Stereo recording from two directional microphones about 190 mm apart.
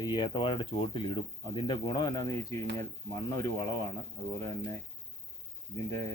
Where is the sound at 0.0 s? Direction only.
20° left (ahead or behind).